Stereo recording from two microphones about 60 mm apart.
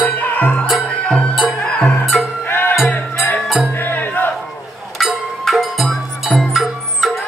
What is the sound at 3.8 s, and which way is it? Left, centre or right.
Music, left.